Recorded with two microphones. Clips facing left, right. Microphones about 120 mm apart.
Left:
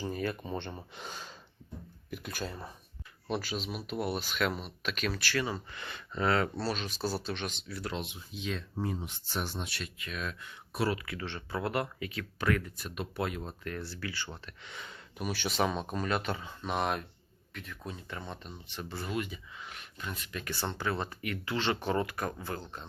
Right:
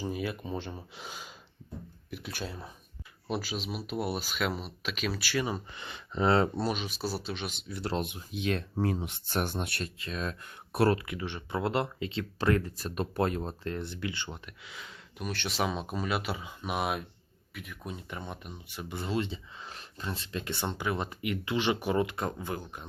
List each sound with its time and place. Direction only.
0.0 s speech: 5° right (ahead or behind)
7.7 s speech: 25° right (ahead or behind)
7.9 s speech: 55° right (ahead or behind)
9.8 s speech: 35° right (ahead or behind)
10.4 s speech: 55° right (ahead or behind)
10.9 s speech: 20° right (ahead or behind)
11.6 s speech: 25° right (ahead or behind)
13.7 s speech: 20° right (ahead or behind)
14.7 s speech: centre (ahead or behind)